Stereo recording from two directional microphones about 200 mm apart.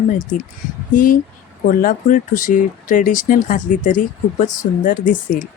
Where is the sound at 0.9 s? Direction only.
45° left (ahead or behind).